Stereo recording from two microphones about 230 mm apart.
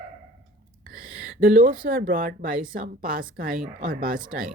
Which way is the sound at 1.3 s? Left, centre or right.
Right.